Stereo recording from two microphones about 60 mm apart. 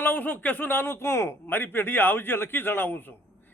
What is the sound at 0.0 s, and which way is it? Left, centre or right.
A man's voice, left.